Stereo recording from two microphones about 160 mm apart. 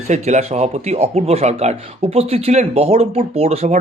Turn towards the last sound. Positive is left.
turn(degrees=-40)  # may be behind; listen again after turning